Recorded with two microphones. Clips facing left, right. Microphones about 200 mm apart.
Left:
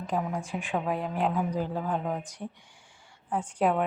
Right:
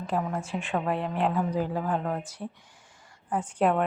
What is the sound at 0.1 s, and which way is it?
A woman's voice, centre (ahead or behind).